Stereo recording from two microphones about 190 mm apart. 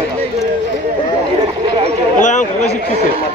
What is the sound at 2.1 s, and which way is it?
Speech, 40° left (ahead or behind).